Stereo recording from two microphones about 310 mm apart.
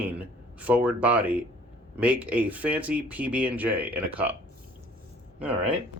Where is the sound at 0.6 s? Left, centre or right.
Centre.